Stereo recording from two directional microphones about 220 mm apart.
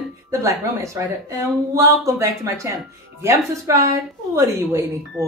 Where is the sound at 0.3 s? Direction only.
15° right (ahead or behind).